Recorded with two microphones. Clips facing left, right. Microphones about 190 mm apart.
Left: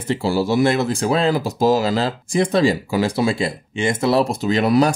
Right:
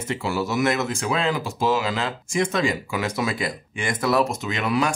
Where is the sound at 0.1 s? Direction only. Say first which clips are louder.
Left 7 dB; 30° left (ahead or behind).